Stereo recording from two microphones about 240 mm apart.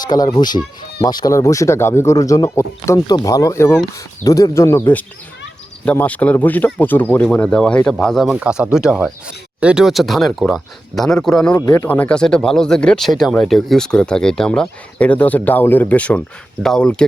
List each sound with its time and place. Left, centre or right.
0.0 s speech: centre